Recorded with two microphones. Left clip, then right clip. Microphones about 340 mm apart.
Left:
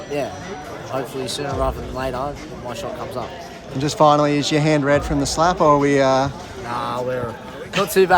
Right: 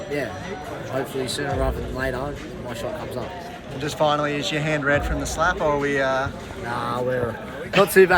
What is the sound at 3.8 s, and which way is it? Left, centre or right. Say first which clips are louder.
Speech: left 7 dB; centre.